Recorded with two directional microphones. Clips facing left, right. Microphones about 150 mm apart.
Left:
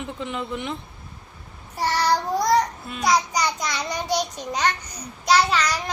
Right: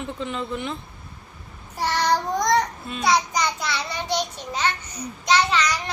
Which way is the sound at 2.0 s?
10° left (ahead or behind).